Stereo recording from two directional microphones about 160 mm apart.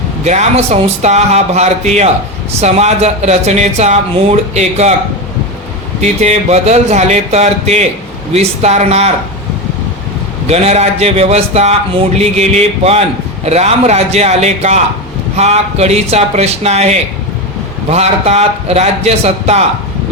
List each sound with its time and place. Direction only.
0.3 s speech: 45° right (ahead or behind)
6.0 s a man's voice: 45° right (ahead or behind)
10.4 s a man's voice: 40° right (ahead or behind)